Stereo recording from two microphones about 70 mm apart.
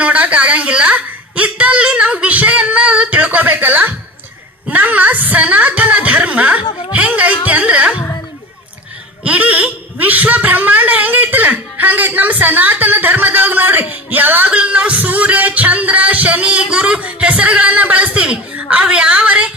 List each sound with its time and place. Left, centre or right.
0.0 s a sound: right
4.7 s speech: right
9.2 s speech: right